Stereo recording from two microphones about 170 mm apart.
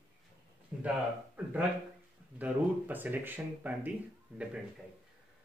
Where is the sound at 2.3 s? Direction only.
10° right (ahead or behind).